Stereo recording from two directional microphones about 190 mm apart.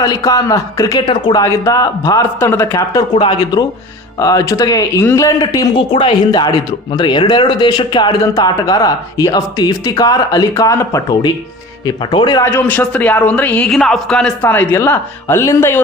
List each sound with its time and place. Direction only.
0.0 s speech: 20° left (ahead or behind)